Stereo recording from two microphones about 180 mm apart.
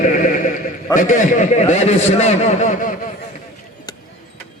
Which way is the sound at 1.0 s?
45° left (ahead or behind).